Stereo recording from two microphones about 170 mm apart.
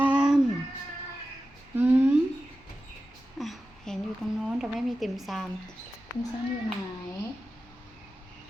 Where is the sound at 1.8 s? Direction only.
10° right (ahead or behind).